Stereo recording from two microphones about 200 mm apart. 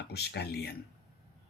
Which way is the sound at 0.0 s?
55° left (ahead or behind).